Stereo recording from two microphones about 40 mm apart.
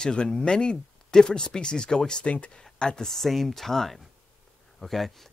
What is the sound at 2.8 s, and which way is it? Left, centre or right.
Speech, centre.